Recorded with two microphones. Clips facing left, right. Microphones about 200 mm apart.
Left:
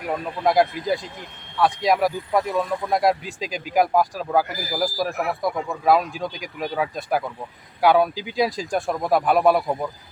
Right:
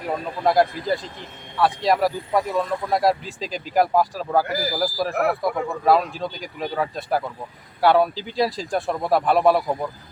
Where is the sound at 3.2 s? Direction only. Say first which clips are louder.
Even; 10° left (ahead or behind).